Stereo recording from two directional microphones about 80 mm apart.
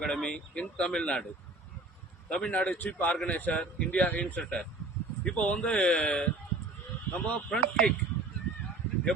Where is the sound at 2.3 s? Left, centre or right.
Centre.